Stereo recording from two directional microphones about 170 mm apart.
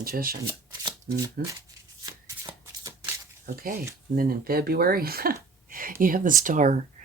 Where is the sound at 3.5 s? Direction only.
60° right (ahead or behind).